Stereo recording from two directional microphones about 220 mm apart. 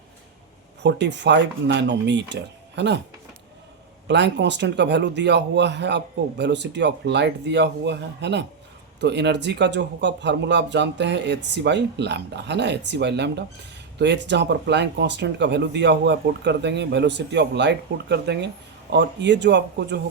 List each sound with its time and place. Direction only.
0.8 s speech: 50° right (ahead or behind)
4.1 s speech: 55° right (ahead or behind)